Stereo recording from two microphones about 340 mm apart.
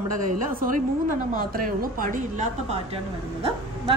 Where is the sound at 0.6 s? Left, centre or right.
Right.